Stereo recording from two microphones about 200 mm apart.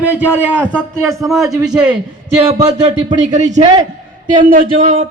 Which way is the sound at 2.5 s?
25° right (ahead or behind).